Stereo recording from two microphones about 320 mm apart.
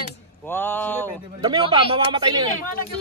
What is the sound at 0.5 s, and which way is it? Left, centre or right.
Speech, centre.